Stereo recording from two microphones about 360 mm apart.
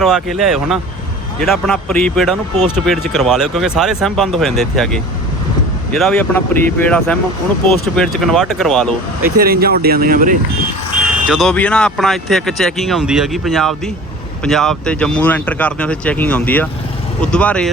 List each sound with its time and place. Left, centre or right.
0.0 s speech: centre
9.2 s speech: right
11.3 s speech: centre